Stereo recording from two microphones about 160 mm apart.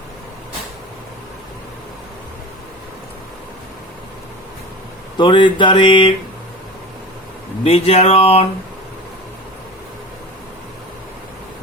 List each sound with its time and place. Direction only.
5.1 s speech: 30° left (ahead or behind)
7.6 s speech: 40° left (ahead or behind)